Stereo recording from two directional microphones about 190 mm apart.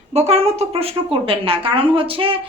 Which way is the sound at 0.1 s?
35° right (ahead or behind).